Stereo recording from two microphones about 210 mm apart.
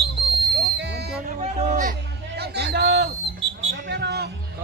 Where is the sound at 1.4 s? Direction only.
30° right (ahead or behind); by 4.3 s 50° right (ahead or behind).